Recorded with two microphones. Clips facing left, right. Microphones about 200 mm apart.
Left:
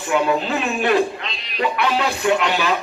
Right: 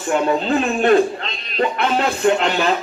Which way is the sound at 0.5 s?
50° right (ahead or behind).